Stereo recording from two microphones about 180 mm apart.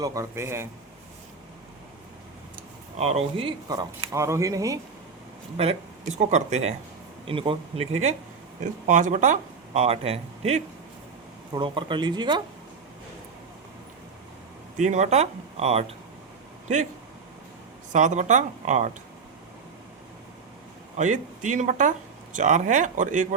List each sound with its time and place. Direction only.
0.0 s a man's voice: 20° right (ahead or behind)
3.0 s speech: 35° right (ahead or behind)
4.1 s a man's voice: 15° right (ahead or behind)
5.5 s speech: 35° right (ahead or behind)
8.6 s speech: 45° right (ahead or behind); by 12.4 s 25° right (ahead or behind)
14.8 s speech: 40° right (ahead or behind)
17.9 s speech: 40° right (ahead or behind)
20.9 s speech: 45° right (ahead or behind)